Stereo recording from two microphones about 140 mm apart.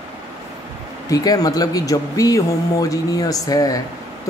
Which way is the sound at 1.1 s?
25° left (ahead or behind).